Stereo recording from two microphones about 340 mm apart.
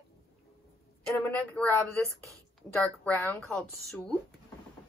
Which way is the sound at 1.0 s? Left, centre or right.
Centre.